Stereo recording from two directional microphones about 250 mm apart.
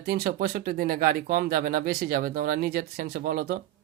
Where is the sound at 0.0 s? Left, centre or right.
Right.